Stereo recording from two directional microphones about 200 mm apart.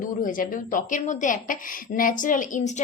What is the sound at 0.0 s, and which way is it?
A woman's voice, 45° left (ahead or behind).